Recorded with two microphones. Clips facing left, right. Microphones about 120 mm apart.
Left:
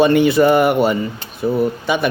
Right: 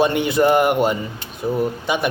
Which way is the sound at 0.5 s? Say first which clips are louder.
Left 3 dB; 15° right (ahead or behind).